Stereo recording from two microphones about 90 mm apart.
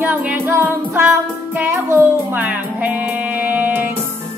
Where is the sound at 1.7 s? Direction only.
30° right (ahead or behind).